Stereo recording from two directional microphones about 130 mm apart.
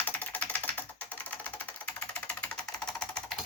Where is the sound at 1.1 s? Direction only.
10° left (ahead or behind).